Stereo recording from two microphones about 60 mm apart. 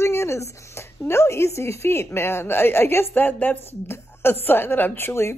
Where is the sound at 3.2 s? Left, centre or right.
Left.